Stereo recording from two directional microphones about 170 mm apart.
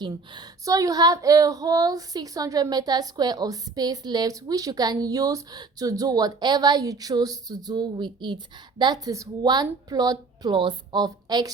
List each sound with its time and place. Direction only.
0.0 s speech: 25° right (ahead or behind)